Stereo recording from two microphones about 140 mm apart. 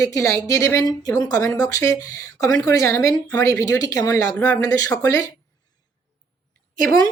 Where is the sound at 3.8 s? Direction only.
25° left (ahead or behind).